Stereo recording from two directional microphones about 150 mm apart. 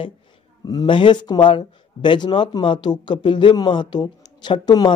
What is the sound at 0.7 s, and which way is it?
Speech, 30° left (ahead or behind).